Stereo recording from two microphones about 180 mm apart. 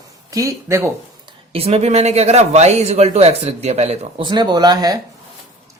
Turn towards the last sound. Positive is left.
turn(degrees=-20)  # may be behind; listen again after turning